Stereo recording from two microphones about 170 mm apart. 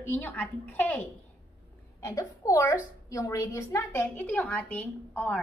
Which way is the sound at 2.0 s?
20° left (ahead or behind).